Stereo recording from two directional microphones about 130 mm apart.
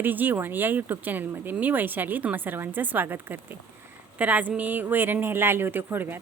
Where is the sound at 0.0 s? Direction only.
15° right (ahead or behind).